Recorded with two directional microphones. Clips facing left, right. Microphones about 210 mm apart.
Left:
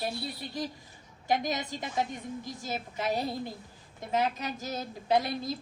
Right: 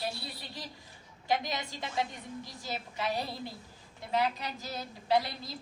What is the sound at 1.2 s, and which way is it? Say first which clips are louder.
A woman's voice: left 3 dB; 45° left (ahead or behind).